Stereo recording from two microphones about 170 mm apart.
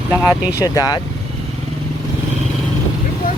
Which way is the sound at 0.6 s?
20° left (ahead or behind).